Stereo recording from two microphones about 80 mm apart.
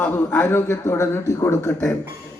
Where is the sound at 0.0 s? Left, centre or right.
Left.